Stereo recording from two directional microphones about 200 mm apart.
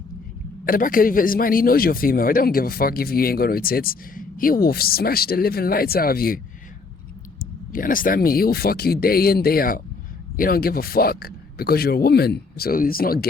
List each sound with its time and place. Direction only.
0.6 s a man's voice: 45° left (ahead or behind)
7.7 s a man's voice: 45° left (ahead or behind)